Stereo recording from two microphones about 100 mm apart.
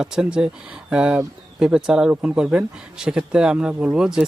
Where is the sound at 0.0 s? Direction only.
5° right (ahead or behind).